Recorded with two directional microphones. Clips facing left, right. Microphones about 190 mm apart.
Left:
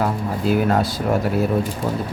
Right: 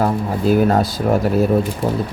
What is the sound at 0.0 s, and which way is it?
Speech, 40° right (ahead or behind).